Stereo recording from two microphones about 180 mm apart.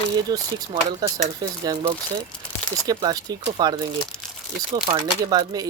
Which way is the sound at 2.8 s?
20° right (ahead or behind).